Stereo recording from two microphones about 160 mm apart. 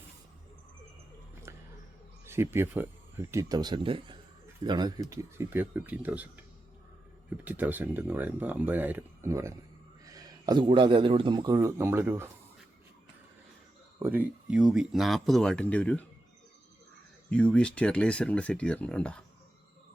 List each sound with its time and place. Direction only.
1.5 s a sound: 20° right (ahead or behind)
2.2 s speech: 15° right (ahead or behind)
7.4 s a man's voice: 10° right (ahead or behind); by 11.6 s 25° right (ahead or behind)
11.6 s speech: 15° right (ahead or behind)
14.0 s speech: 10° right (ahead or behind); by 16.0 s 10° left (ahead or behind)
17.2 s speech: 5° left (ahead or behind)